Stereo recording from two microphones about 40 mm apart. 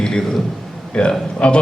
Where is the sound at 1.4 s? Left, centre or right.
Left.